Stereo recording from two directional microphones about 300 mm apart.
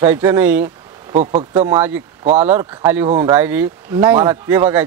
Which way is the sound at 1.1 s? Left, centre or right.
Right.